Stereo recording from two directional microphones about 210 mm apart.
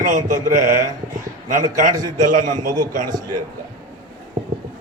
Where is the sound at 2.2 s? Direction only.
40° right (ahead or behind).